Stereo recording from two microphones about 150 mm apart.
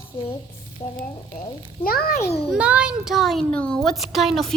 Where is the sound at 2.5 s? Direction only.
10° right (ahead or behind).